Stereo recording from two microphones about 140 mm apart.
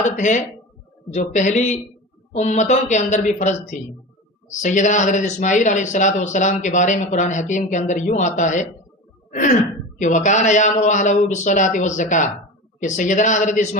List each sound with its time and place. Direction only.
0.0 s speech: 60° left (ahead or behind)
9.3 s a sound: 65° left (ahead or behind)
10.0 s speech: 65° left (ahead or behind)